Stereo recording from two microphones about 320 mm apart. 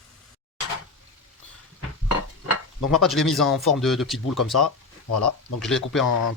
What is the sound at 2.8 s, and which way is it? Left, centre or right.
Speech, centre.